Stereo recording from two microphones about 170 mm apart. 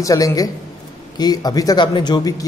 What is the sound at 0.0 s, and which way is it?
A man's voice, 20° left (ahead or behind).